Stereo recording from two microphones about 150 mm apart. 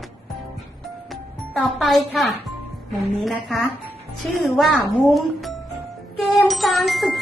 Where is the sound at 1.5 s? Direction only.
Centre (ahead or behind).